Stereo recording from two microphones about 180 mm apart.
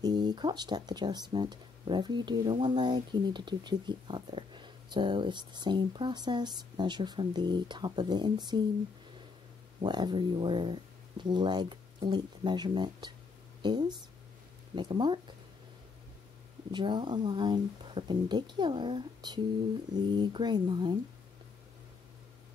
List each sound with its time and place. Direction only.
0.0 s speech: 25° right (ahead or behind)
9.8 s speech: 25° right (ahead or behind)
16.7 s speech: 25° right (ahead or behind)